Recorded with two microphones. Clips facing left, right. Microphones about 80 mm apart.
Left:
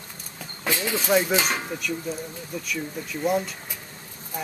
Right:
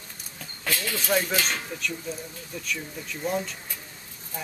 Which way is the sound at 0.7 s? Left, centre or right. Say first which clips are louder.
Left 4 dB; left.